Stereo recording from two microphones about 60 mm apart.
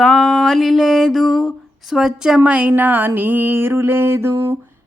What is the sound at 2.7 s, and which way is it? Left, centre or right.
Mantra, right.